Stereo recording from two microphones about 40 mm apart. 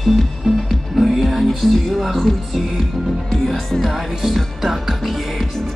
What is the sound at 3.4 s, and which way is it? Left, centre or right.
Music, centre.